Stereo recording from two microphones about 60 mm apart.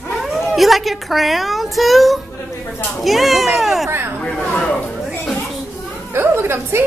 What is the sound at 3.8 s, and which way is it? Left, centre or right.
Hubbub, right.